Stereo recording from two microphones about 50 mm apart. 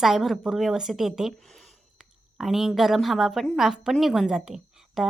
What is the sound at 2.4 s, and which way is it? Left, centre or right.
A woman's voice, centre.